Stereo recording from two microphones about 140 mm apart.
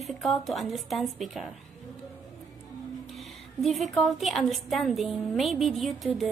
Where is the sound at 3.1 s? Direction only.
Centre (ahead or behind).